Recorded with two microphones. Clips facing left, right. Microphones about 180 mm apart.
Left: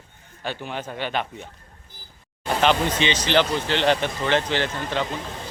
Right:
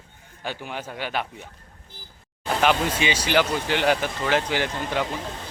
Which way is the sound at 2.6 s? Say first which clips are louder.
Left 1 dB; 5° right (ahead or behind).